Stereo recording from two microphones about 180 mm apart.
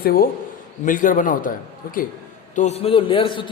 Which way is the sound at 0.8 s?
45° left (ahead or behind).